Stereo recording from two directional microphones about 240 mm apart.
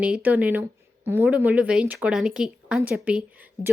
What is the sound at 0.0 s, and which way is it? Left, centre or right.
A woman's voice, centre.